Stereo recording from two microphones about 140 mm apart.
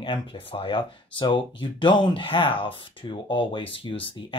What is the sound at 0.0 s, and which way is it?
Speech, 35° left (ahead or behind).